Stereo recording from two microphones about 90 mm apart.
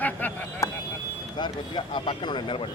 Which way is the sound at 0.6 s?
40° left (ahead or behind).